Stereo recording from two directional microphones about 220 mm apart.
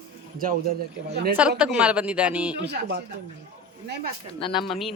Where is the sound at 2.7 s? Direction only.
50° right (ahead or behind).